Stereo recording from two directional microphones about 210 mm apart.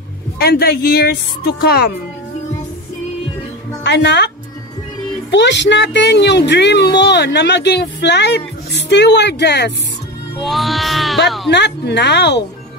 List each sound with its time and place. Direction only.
0.4 s speech: 45° left (ahead or behind)
3.8 s speech: 55° left (ahead or behind)
5.3 s speech: 55° left (ahead or behind)
10.4 s music: centre (ahead or behind)
11.2 s speech: centre (ahead or behind)
11.5 s speech: 55° left (ahead or behind)